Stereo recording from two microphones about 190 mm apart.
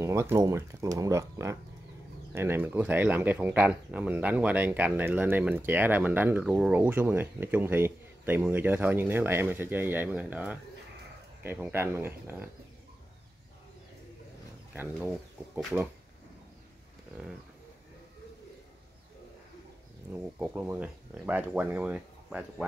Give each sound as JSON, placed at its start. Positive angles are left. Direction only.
{"t": 0.0, "sound": "speech", "side_deg": -15}
{"t": 15.5, "sound": "speech", "side_deg": -10}
{"t": 20.1, "sound": "speech", "side_deg": -10}